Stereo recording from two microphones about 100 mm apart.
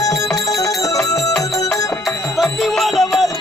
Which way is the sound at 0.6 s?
35° left (ahead or behind).